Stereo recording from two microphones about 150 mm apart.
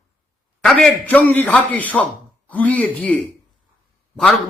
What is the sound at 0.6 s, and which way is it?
A man's voice, 5° left (ahead or behind).